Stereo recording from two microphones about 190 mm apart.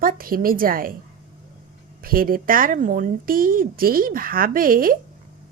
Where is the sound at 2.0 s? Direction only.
50° right (ahead or behind).